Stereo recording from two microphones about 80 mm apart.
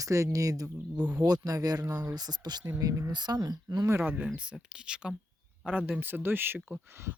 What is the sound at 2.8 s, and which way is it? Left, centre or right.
Speech, right.